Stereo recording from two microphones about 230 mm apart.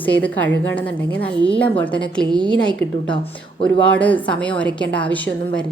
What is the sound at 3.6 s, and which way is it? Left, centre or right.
A woman's voice, centre.